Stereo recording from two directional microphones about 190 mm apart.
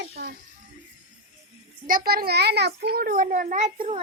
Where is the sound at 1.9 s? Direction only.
50° right (ahead or behind).